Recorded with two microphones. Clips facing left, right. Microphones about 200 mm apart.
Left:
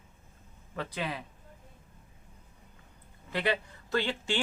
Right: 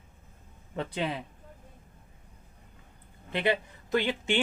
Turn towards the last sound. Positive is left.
turn(degrees=-20)  # may be behind; listen again after turning